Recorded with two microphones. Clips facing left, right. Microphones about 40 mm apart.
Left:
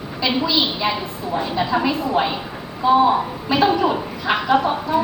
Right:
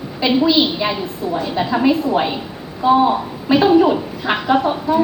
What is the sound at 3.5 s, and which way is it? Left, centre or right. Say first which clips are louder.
Speech: right 4 dB; right.